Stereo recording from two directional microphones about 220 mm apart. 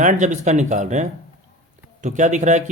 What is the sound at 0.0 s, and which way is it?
Speech, 35° right (ahead or behind).